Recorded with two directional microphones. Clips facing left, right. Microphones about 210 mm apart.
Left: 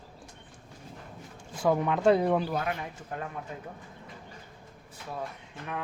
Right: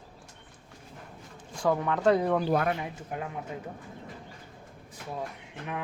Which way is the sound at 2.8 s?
10° right (ahead or behind).